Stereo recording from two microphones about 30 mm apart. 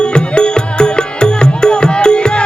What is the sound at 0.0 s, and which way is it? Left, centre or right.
Music, left.